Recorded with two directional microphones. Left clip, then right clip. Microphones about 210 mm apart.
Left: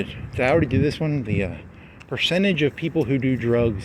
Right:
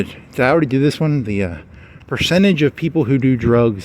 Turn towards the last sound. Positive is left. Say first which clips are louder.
# right 6 dB
turn(degrees=-60)  # may be behind; listen again after turning